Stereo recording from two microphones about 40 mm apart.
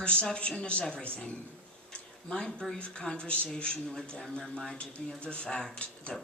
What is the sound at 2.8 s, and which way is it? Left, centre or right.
Speech, left.